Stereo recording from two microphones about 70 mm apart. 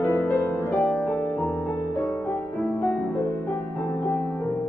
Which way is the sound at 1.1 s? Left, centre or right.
Left.